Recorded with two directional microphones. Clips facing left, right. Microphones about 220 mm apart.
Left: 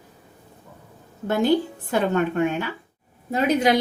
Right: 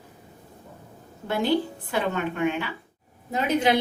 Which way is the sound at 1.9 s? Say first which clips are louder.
Left 6 dB; 45° left (ahead or behind).